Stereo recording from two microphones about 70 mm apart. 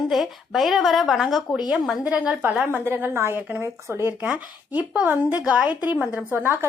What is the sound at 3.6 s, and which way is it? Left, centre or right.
Speech, right.